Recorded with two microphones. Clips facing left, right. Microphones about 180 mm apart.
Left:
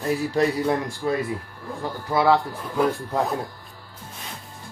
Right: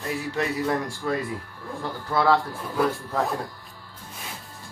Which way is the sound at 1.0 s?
15° left (ahead or behind).